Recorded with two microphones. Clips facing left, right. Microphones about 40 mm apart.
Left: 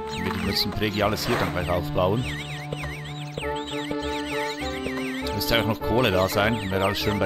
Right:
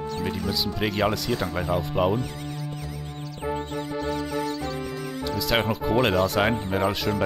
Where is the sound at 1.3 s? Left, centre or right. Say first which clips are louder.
Left 2 dB; left.